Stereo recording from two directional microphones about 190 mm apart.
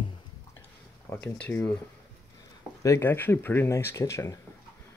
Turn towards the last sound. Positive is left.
turn(degrees=15)  # may be behind; listen again after turning